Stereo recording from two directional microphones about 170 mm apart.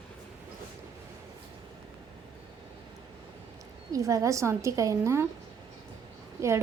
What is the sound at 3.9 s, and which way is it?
A woman's voice, 20° right (ahead or behind).